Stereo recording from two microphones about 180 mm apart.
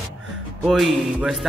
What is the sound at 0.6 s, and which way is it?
Speech, centre (ahead or behind).